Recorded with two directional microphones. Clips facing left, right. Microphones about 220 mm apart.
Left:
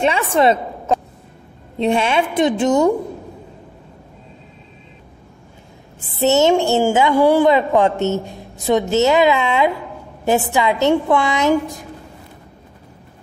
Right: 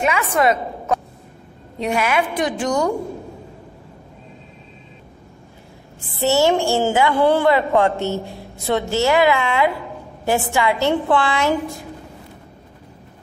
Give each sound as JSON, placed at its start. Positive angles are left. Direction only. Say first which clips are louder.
{"t": 0.0, "sound": "a woman's voice", "louder": "left 3 dB", "side_deg": 30}
{"t": 5.9, "sound": "a woman's voice", "louder": "left 3 dB", "side_deg": 20}